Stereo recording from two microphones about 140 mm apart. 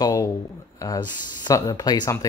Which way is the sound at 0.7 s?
30° left (ahead or behind).